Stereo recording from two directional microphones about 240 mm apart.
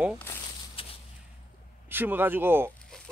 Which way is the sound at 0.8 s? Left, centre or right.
Left.